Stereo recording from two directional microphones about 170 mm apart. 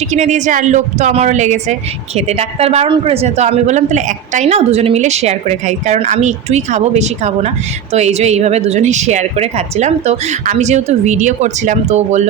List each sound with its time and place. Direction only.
0.1 s a woman's voice: 45° right (ahead or behind)